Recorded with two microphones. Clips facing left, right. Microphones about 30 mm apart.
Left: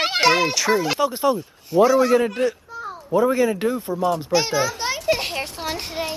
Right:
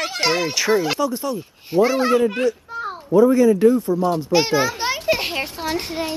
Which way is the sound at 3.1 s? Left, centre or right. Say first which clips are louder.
Right 5 dB; centre.